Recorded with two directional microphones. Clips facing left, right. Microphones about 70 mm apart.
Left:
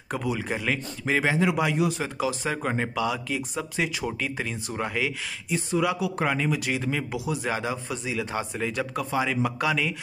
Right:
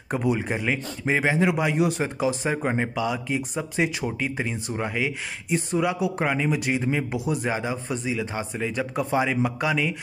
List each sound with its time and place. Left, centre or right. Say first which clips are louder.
0.1 s speech: right 4 dB; right
1.7 s speech: right 2 dB; right
2.4 s speech: right 3 dB; centre
4.0 s speech: right 2 dB; right
5.5 s speech: right 1 dB; right
6.1 s speech: right 1 dB; centre
7.1 s speech: right 3 dB; right
7.4 s speech: right 1 dB; centre
7.7 s speech: right 3 dB; right
8.1 s speech: left 1 dB; centre
8.5 s speech: right 2 dB; centre
8.9 s speech: right 5 dB; right
9.6 s speech: right 1 dB; centre